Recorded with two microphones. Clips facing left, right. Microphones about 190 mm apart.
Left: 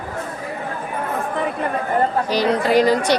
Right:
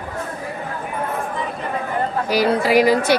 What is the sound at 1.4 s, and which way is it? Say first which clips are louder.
Chatter: left 4 dB; 60° left (ahead or behind).